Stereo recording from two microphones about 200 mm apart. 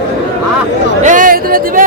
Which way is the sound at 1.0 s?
40° right (ahead or behind).